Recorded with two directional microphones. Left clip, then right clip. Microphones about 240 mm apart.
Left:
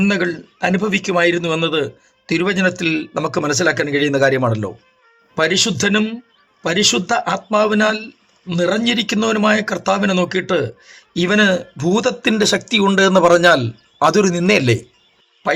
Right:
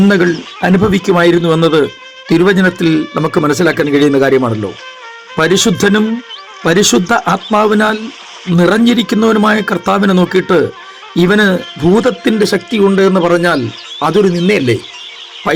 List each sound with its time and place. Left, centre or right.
0.1 s speech: right
5.4 s a man's voice: right; by 14.8 s centre